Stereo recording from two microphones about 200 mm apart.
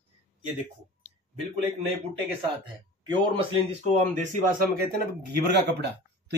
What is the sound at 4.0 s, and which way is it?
Speech, 35° right (ahead or behind).